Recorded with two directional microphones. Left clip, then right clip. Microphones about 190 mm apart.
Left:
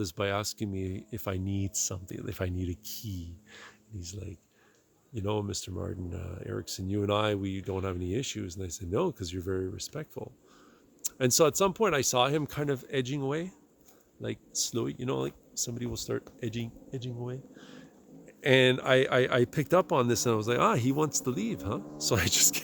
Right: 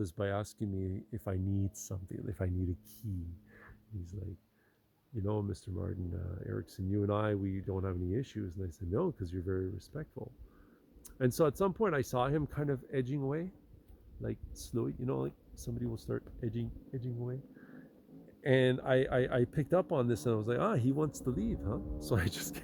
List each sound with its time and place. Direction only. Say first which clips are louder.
0.0 s speech: left 5 dB; 10° left (ahead or behind)
18.4 s speech: left 6 dB; 15° left (ahead or behind)